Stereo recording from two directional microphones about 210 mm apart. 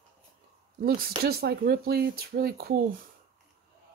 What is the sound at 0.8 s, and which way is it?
Speech, 45° right (ahead or behind).